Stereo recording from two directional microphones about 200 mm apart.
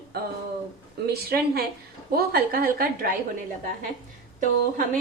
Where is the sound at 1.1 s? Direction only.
50° right (ahead or behind).